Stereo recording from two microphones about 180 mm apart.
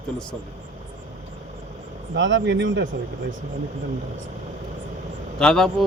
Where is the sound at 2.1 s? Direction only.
90° right.